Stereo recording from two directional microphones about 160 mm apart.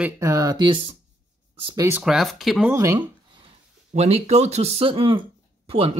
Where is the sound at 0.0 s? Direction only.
20° right (ahead or behind).